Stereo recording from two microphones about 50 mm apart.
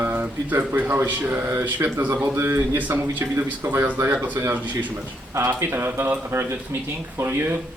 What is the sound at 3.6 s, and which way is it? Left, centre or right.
Speech, right.